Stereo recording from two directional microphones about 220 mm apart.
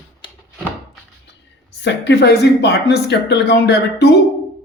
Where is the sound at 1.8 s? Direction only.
50° left (ahead or behind).